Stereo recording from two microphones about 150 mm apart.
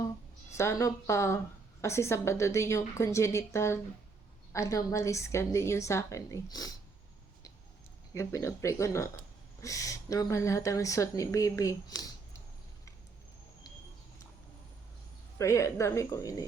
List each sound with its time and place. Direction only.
0.5 s speech: 20° left (ahead or behind)
8.1 s speech: 20° left (ahead or behind)
15.4 s speech: 20° left (ahead or behind)